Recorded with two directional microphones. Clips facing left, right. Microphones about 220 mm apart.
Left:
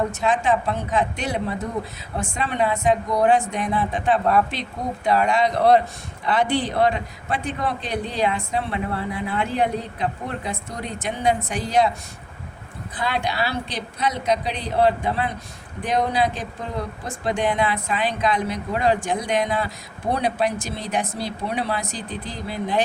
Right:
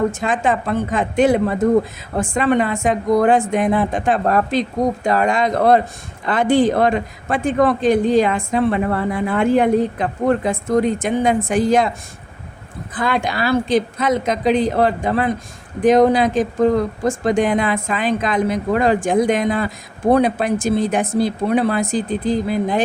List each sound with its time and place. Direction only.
0.3 s a man's voice: 50° right (ahead or behind)
12.9 s a man's voice: 50° right (ahead or behind)
16.3 s speech: 90° right
17.2 s a man's voice: 50° right (ahead or behind)